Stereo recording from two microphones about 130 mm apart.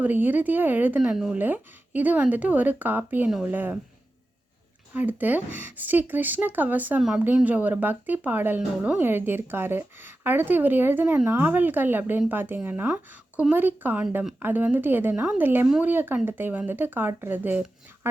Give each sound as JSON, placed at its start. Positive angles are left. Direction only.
{"t": 0.0, "sound": "speech", "side_deg": -15}
{"t": 4.9, "sound": "speech", "side_deg": -15}
{"t": 18.0, "sound": "dog", "side_deg": -15}